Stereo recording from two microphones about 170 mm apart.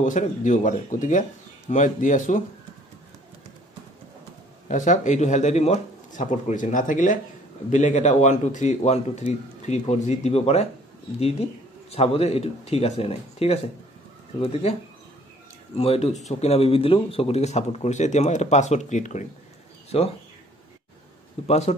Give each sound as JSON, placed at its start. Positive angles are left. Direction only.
{"t": 0.0, "sound": "a man's voice", "side_deg": 50}
{"t": 4.6, "sound": "a man's voice", "side_deg": 45}
{"t": 21.5, "sound": "speech", "side_deg": 40}